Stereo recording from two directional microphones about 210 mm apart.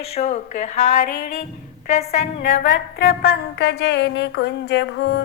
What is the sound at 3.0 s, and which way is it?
A woman's voice, 45° left (ahead or behind).